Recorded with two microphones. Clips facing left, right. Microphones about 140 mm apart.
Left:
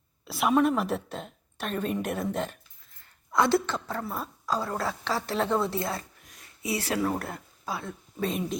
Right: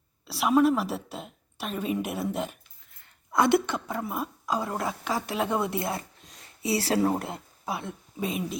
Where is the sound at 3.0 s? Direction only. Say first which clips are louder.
Right 1 dB; 20° right (ahead or behind).